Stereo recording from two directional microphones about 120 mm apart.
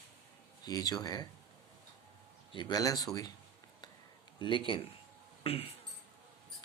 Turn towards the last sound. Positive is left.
turn(degrees=55)  # may be behind; listen again after turning